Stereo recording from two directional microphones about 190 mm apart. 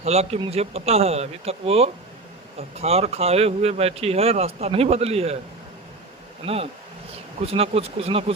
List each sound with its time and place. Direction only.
0.0 s speech: 35° right (ahead or behind)
6.4 s speech: 30° right (ahead or behind)